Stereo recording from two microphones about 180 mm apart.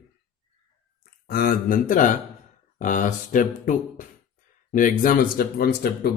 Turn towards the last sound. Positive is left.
turn(degrees=60)  # may be behind; listen again after turning